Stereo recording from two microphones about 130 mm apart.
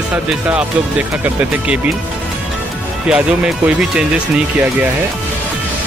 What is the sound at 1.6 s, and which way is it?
Speech, 10° right (ahead or behind).